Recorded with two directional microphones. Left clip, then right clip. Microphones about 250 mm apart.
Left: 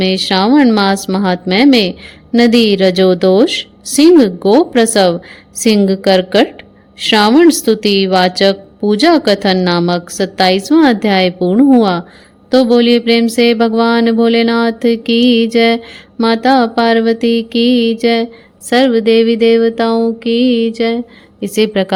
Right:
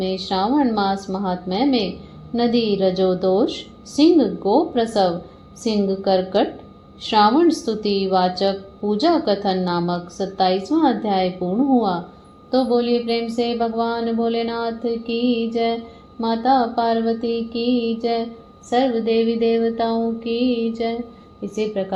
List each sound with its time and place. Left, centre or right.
0.0 s mantra: left